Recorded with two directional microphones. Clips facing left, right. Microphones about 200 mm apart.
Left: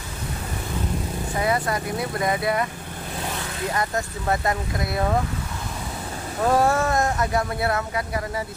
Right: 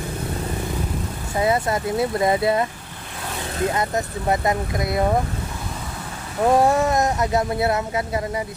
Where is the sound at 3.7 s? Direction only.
20° right (ahead or behind).